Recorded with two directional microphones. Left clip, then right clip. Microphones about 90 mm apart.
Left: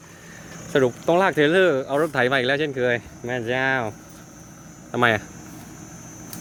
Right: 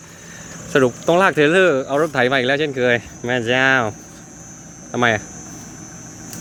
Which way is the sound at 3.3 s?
40° right (ahead or behind).